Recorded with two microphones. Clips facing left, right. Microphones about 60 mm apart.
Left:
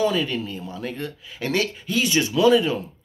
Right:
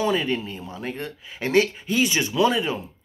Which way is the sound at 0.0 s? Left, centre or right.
Right.